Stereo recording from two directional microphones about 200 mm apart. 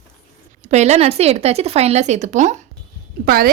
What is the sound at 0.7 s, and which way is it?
Speech, 35° right (ahead or behind).